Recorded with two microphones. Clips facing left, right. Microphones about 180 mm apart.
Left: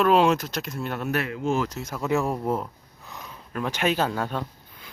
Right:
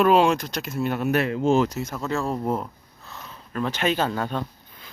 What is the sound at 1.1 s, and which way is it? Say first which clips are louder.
Speech: right 5 dB; 30° right (ahead or behind).